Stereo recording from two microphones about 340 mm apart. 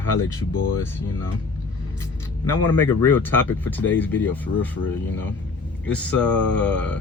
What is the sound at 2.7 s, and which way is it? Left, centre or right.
Speech, centre.